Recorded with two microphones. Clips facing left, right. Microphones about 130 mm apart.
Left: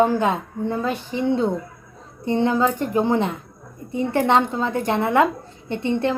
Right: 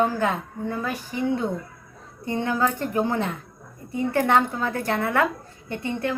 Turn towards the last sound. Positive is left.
turn(degrees=25)  # may be behind; listen again after turning